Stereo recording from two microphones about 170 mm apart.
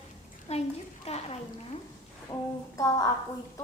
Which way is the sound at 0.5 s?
40° left (ahead or behind).